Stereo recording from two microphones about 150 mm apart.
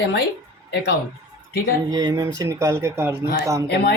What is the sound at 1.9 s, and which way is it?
Speech, 25° right (ahead or behind).